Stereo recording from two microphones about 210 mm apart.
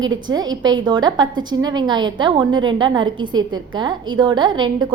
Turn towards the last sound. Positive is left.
turn(degrees=-20)  # may be behind; listen again after turning